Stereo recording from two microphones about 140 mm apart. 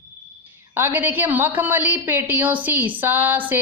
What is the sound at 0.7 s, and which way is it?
A woman's voice, 15° right (ahead or behind).